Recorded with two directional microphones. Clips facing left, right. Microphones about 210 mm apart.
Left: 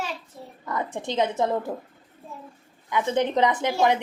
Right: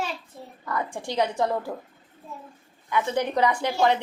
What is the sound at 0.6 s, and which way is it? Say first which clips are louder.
A woman's voice: left 1 dB; 20° left (ahead or behind).